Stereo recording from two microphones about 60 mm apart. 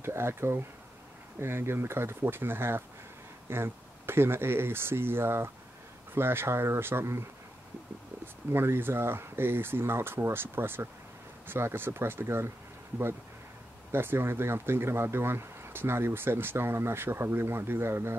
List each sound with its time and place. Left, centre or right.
0.0 s speech: right
8.5 s speech: right
13.9 s speech: right